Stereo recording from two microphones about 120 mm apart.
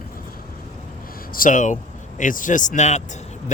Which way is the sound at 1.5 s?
90° left.